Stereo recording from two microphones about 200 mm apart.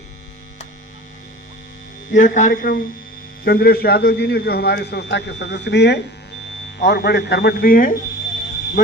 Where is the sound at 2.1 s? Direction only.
40° left (ahead or behind).